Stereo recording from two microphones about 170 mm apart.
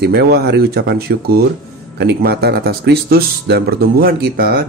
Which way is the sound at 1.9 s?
75° right (ahead or behind).